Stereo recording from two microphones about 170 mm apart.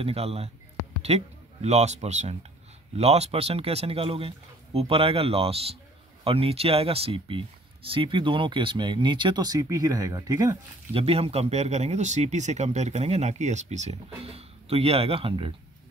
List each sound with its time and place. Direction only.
0.0 s a man's voice: 35° right (ahead or behind); by 10.6 s 20° right (ahead or behind)
10.9 s a man's voice: 35° right (ahead or behind)